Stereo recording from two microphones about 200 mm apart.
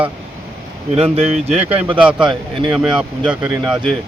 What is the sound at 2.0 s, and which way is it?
Speech, 5° right (ahead or behind).